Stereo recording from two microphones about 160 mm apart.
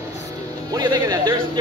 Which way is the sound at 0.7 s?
25° right (ahead or behind).